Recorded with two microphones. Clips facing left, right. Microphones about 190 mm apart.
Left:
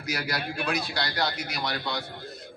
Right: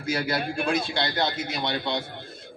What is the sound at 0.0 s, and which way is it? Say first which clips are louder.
A man's voice: right 5 dB; 25° right (ahead or behind).